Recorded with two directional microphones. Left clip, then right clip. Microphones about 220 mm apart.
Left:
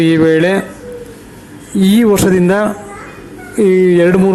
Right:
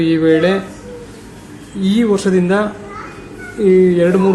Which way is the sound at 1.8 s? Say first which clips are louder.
Left 5 dB; 35° left (ahead or behind).